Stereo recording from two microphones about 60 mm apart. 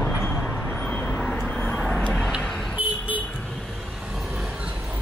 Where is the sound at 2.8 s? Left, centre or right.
Right.